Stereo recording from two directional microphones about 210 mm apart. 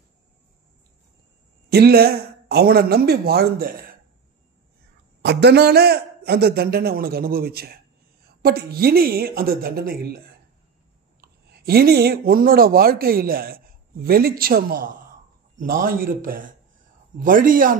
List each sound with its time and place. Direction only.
1.7 s a man's voice: 50° right (ahead or behind)
5.2 s a man's voice: 55° right (ahead or behind)